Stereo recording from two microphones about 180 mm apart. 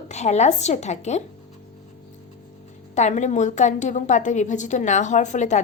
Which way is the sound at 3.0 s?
40° left (ahead or behind).